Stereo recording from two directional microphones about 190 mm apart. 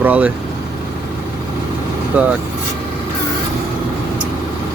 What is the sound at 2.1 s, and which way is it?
Speech, 5° right (ahead or behind).